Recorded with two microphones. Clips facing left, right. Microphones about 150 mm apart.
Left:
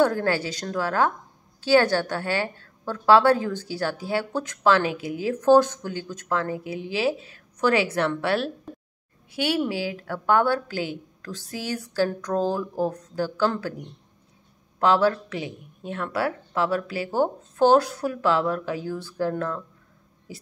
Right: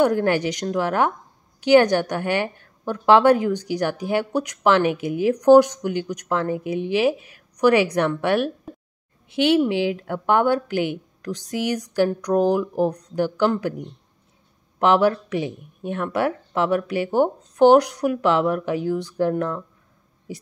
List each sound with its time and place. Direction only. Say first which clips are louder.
0.0 s a woman's voice: right 3 dB; 20° right (ahead or behind)
14.8 s a woman's voice: right 3 dB; 20° right (ahead or behind)